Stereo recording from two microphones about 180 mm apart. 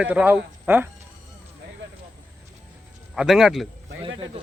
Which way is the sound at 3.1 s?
5° right (ahead or behind).